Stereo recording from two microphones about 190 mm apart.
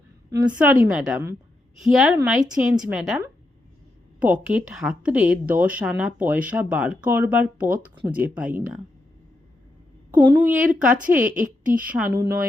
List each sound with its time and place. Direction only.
0.3 s a woman's voice: 10° right (ahead or behind)
4.2 s a woman's voice: 5° right (ahead or behind)
10.2 s a woman's voice: 10° right (ahead or behind)
11.3 s a woman's voice: 45° right (ahead or behind)
11.8 s a woman's voice: 10° right (ahead or behind)